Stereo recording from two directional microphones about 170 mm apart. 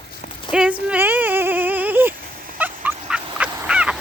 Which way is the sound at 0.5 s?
10° right (ahead or behind).